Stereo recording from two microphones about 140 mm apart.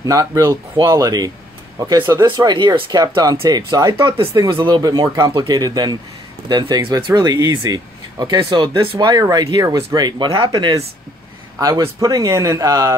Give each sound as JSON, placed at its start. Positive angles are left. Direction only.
{"t": 0.0, "sound": "speech", "side_deg": -25}